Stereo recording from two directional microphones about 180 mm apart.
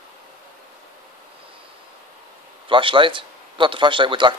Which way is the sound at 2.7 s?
30° right (ahead or behind).